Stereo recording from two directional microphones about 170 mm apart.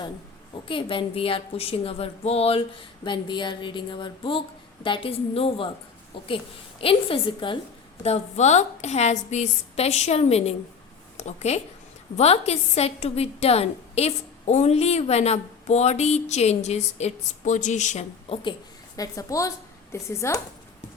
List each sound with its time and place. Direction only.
0.7 s a woman's voice: 30° left (ahead or behind)
8.0 s a woman's voice: 40° left (ahead or behind)
18.9 s speech: 20° left (ahead or behind)